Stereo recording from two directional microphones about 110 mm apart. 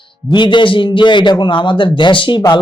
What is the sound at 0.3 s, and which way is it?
Speech, 45° left (ahead or behind).